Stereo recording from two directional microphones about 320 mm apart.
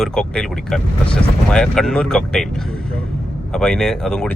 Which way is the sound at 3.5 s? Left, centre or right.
Centre.